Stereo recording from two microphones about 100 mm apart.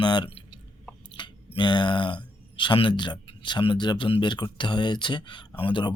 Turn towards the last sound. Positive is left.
turn(degrees=55)  # may be behind; listen again after turning